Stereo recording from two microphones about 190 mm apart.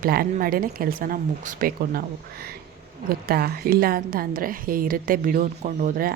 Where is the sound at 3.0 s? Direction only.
50° right (ahead or behind).